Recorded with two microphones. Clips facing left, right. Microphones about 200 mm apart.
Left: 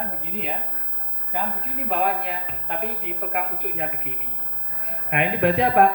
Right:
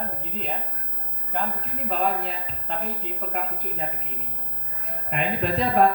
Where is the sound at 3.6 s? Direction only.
70° left (ahead or behind).